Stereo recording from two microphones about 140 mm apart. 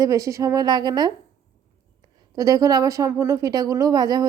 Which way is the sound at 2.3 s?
25° right (ahead or behind).